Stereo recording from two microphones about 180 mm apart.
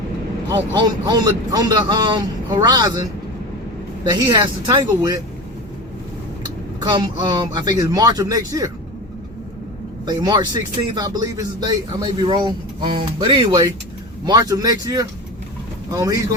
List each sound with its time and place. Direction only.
0.5 s speech: 25° right (ahead or behind)
4.0 s speech: 25° right (ahead or behind)
6.7 s speech: 25° right (ahead or behind)
10.1 s speech: 20° right (ahead or behind)